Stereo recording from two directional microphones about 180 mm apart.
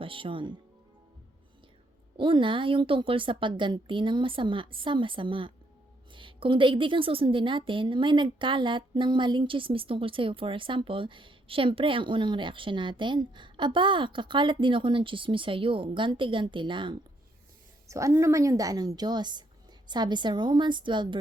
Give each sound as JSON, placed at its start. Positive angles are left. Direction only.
{"t": 0.0, "sound": "a woman's voice", "side_deg": -30}
{"t": 2.1, "sound": "a woman's voice", "side_deg": -25}